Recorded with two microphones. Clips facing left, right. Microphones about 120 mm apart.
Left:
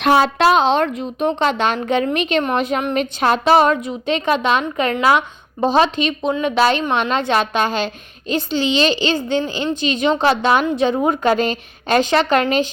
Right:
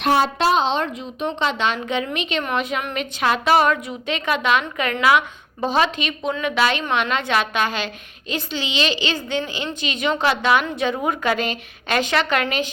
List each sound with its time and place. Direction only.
0.0 s a woman's voice: 90° left; by 12.6 s 35° left (ahead or behind)